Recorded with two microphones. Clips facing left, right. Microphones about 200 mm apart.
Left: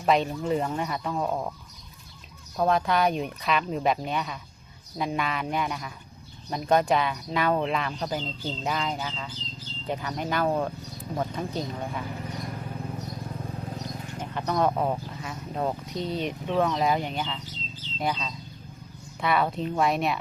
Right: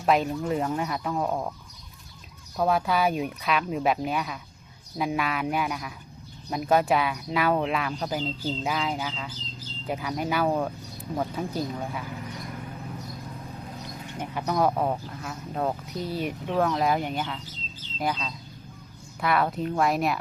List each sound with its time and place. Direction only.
0.0 s speech: centre (ahead or behind)
2.6 s speech: 5° right (ahead or behind)
14.2 s speech: 10° right (ahead or behind)